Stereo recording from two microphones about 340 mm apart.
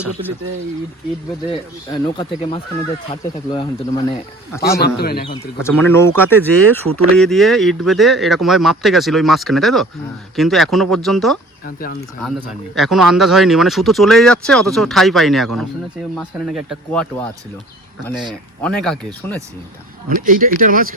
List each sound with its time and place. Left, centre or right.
1.9 s speech: centre
4.8 s a man's voice: left
5.3 s speech: centre
6.8 s speech: right
7.2 s speech: centre
11.6 s a man's voice: left
12.7 s speech: centre
18.6 s speech: centre
20.1 s speech: right